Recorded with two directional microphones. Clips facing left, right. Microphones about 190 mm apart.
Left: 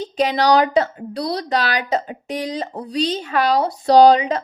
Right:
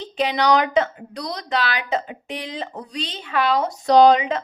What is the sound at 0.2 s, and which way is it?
A woman's voice, 40° left (ahead or behind).